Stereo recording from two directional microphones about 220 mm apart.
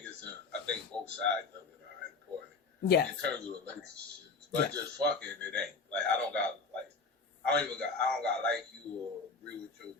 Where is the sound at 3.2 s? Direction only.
5° left (ahead or behind).